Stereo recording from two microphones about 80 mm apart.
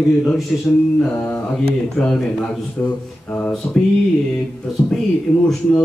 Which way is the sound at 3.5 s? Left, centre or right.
Centre.